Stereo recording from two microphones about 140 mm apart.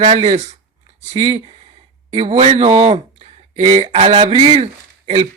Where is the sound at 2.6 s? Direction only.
40° right (ahead or behind).